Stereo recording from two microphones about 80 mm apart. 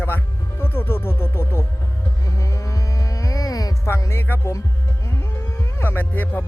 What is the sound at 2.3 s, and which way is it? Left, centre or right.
Music, left.